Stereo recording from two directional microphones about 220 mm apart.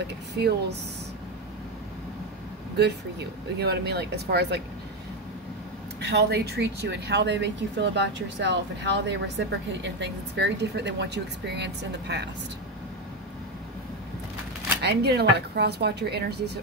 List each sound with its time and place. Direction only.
0.3 s speech: 50° right (ahead or behind)
2.8 s speech: 50° right (ahead or behind)
5.9 s speech: 50° right (ahead or behind)
14.8 s speech: 50° right (ahead or behind)